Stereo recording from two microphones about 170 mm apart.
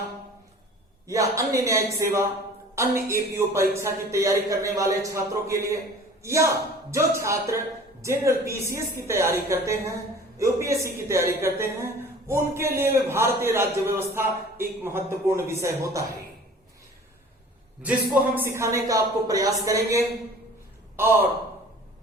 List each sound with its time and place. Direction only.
1.0 s a man's voice: 20° right (ahead or behind)
18.1 s a man's voice: 10° right (ahead or behind)